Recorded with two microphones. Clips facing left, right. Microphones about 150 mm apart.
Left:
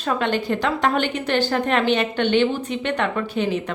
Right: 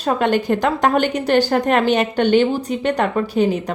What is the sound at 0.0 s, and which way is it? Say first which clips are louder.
A woman's voice: right 5 dB; 45° right (ahead or behind).